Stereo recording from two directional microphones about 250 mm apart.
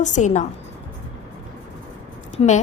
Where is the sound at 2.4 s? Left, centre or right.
Left.